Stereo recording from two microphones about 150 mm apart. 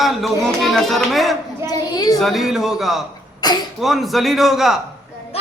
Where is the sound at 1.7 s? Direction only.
25° left (ahead or behind).